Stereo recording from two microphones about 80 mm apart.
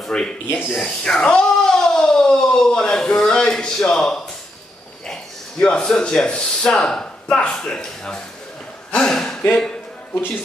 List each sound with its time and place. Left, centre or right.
0.1 s speech: centre
0.5 s speech: left
0.7 s speech: centre
8.9 s a sound: centre